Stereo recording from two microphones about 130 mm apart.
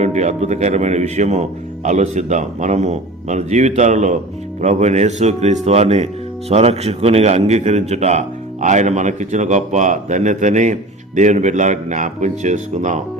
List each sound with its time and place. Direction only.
0.0 s speech: 60° right (ahead or behind)